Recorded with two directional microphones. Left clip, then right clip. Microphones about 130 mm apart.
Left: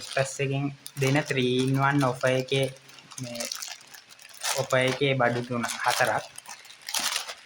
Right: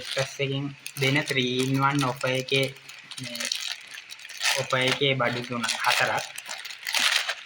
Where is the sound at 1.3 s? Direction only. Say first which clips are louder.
Even; 45° left (ahead or behind).